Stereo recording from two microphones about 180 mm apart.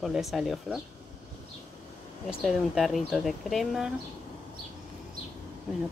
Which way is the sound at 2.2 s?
Centre (ahead or behind).